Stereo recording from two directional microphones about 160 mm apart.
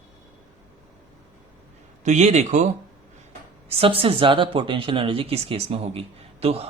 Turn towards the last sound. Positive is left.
turn(degrees=-40)  # may be behind; listen again after turning